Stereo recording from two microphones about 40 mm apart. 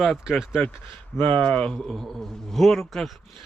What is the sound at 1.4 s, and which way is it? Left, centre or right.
Speech, left.